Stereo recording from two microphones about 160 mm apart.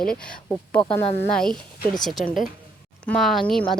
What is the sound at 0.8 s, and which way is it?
Speech, 30° left (ahead or behind).